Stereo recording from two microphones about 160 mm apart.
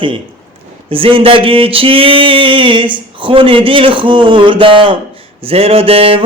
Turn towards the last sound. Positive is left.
turn(degrees=-35)  # may be behind; listen again after turning